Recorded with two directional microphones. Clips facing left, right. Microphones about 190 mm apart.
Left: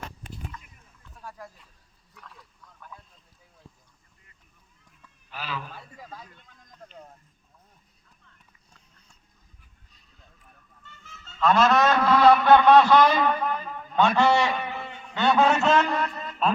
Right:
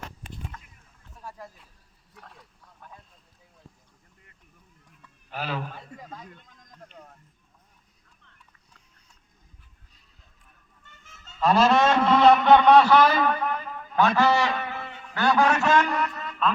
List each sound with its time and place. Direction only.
1.2 s a sound: 25° right (ahead or behind)
5.3 s speech: 55° right (ahead or behind)
10.8 s a man's voice: 40° right (ahead or behind); by 14.6 s centre (ahead or behind)
14.6 s a sound: 15° left (ahead or behind)
15.4 s a man's voice: 25° left (ahead or behind)
16.0 s music: 30° left (ahead or behind)